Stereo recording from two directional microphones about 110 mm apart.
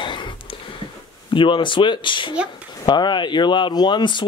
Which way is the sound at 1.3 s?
50° left (ahead or behind).